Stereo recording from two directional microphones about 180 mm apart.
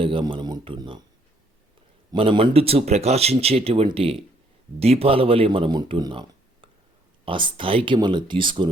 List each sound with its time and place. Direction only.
0.0 s speech: 30° right (ahead or behind)
2.1 s speech: 30° right (ahead or behind)